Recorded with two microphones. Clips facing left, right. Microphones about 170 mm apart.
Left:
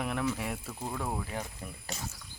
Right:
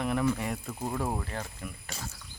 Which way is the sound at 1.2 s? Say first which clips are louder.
Even; 10° left (ahead or behind).